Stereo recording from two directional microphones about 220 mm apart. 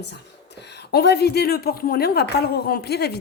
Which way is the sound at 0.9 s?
50° left (ahead or behind).